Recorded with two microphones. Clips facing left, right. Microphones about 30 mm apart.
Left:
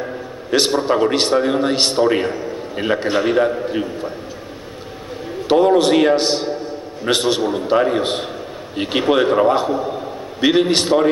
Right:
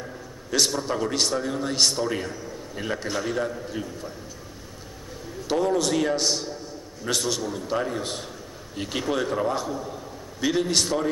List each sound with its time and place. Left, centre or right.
0.0 s a man's voice: left
5.5 s a man's voice: left